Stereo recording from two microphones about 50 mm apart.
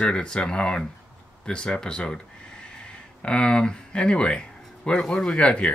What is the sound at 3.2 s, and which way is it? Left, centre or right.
Speech, centre.